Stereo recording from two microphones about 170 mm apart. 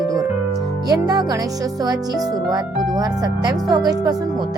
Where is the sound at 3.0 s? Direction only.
25° right (ahead or behind).